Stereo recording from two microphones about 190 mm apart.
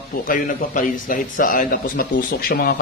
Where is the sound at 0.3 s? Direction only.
45° left (ahead or behind).